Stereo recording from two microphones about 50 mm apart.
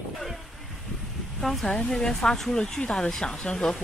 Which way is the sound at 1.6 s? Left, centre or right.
Centre.